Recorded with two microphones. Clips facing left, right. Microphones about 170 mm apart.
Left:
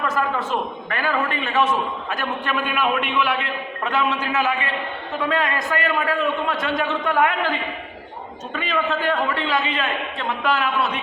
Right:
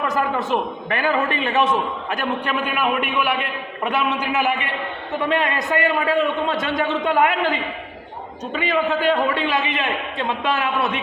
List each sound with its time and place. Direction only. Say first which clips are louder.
0.1 s a man's voice: right 2 dB; 20° right (ahead or behind)
8.5 s a man's voice: right 3 dB; 15° right (ahead or behind)